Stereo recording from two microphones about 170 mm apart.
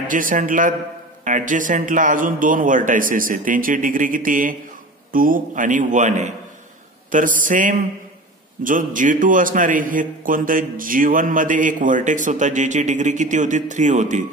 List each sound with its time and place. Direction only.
0.1 s a man's voice: 50° right (ahead or behind)